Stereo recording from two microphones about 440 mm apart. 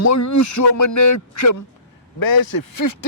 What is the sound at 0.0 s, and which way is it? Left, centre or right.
Speech, left.